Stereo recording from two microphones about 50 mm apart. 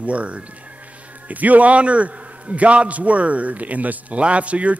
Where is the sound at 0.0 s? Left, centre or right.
Right.